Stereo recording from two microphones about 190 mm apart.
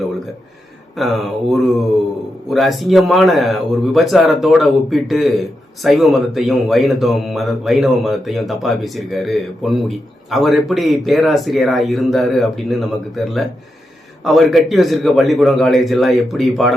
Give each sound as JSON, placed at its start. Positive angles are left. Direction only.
{"t": 0.9, "sound": "speech", "side_deg": 0}